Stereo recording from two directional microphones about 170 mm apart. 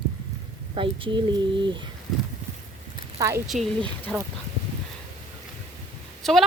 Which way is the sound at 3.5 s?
45° right (ahead or behind).